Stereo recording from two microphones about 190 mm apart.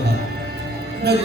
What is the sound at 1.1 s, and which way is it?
Speech, 60° right (ahead or behind).